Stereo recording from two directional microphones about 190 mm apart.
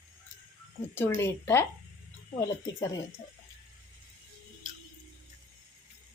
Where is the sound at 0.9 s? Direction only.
10° left (ahead or behind).